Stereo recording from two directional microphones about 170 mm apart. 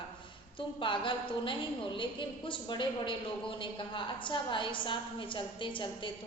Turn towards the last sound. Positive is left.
turn(degrees=30)  # may be behind; listen again after turning